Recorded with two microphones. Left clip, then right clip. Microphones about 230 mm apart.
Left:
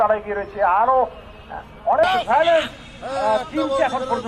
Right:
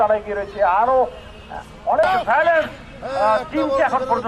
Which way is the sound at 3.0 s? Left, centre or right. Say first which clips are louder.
Right 2 dB; right.